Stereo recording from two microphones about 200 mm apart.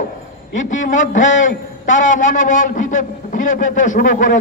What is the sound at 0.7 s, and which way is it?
Speech, 40° left (ahead or behind).